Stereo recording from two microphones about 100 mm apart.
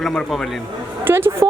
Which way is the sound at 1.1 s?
25° right (ahead or behind).